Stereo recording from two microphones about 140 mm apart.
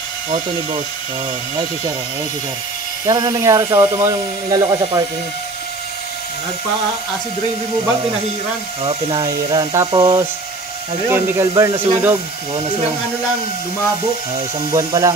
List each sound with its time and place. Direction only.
3.1 s speech: 25° right (ahead or behind)
4.5 s speech: 30° right (ahead or behind)
9.2 s speech: 30° right (ahead or behind)
14.7 s speech: 25° right (ahead or behind)